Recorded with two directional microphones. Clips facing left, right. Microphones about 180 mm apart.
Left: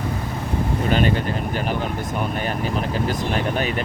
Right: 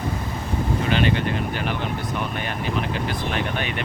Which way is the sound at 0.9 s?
45° left (ahead or behind).